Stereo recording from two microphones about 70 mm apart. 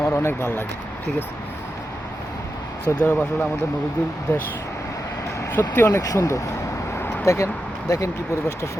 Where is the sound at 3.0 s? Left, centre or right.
Left.